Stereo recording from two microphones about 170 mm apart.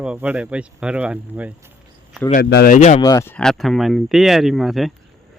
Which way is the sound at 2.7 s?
45° left (ahead or behind).